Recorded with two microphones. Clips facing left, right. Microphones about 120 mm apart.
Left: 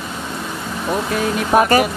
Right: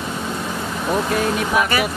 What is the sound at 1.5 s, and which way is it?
Speech, 45° left (ahead or behind).